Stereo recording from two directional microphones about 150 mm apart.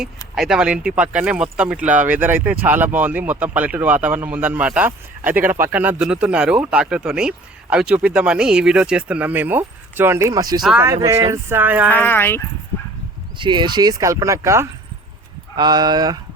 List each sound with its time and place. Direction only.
0.3 s speech: 5° right (ahead or behind)
11.9 s speech: 15° left (ahead or behind)
13.4 s speech: 30° right (ahead or behind)